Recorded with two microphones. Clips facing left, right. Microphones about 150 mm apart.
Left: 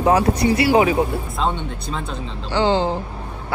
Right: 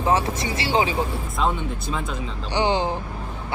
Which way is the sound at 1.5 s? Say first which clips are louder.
Even; 5° right (ahead or behind).